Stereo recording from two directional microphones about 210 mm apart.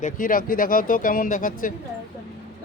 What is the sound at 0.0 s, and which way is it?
Speech, 40° left (ahead or behind).